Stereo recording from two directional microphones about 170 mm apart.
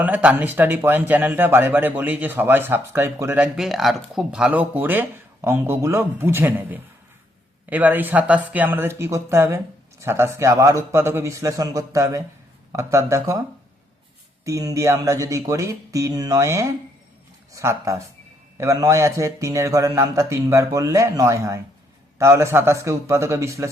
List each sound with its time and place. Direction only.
0.0 s a man's voice: 10° right (ahead or behind)
14.4 s a man's voice: 20° right (ahead or behind)